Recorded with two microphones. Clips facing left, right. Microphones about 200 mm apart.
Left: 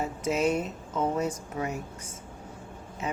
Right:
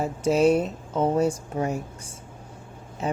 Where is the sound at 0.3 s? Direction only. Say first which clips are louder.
Right 7 dB; 35° right (ahead or behind).